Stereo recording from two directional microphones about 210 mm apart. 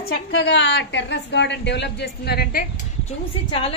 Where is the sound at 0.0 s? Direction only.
50° left (ahead or behind).